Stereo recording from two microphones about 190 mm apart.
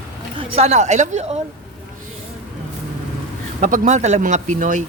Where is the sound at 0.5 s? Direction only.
35° right (ahead or behind).